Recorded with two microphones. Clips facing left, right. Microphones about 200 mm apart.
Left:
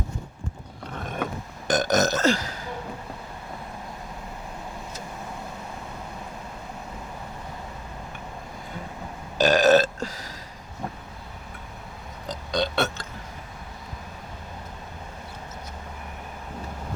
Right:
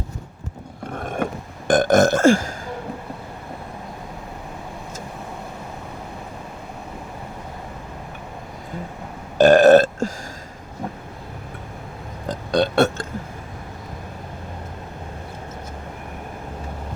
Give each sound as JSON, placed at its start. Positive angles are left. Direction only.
{"t": 0.9, "sound": "mechanisms", "side_deg": -50}
{"t": 1.6, "sound": "burping", "side_deg": -55}
{"t": 9.4, "sound": "burping", "side_deg": -55}
{"t": 12.2, "sound": "burping", "side_deg": -55}